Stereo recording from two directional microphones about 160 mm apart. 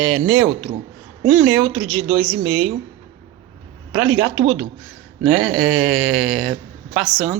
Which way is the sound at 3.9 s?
5° right (ahead or behind).